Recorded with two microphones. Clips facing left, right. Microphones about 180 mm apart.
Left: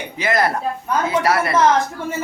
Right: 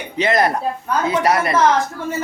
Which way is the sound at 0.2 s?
20° right (ahead or behind).